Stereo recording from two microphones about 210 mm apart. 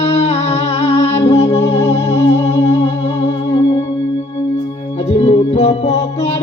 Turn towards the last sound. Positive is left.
turn(degrees=30)  # may be behind; listen again after turning